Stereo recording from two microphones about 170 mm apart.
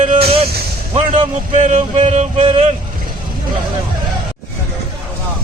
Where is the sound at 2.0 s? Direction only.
40° right (ahead or behind).